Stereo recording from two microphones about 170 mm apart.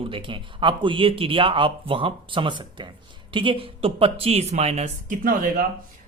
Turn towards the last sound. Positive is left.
turn(degrees=-60)  # may be behind; listen again after turning